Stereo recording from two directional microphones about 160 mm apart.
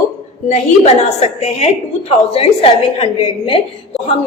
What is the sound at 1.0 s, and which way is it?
A woman's voice, 45° left (ahead or behind).